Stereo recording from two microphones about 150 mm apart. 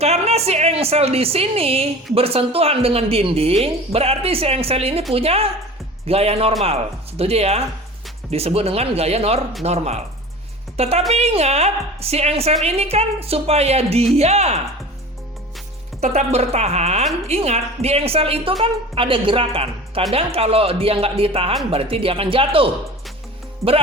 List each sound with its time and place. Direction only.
0.0 s a woman's voice: 45° right (ahead or behind)
16.0 s a woman's voice: 50° right (ahead or behind)